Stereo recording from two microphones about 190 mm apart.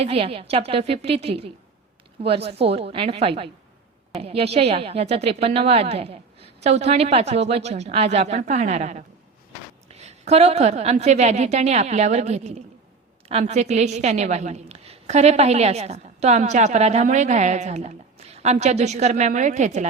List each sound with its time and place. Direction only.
0.0 s a woman's voice: 30° right (ahead or behind)